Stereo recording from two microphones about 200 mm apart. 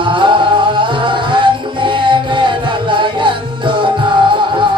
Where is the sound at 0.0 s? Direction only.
25° right (ahead or behind).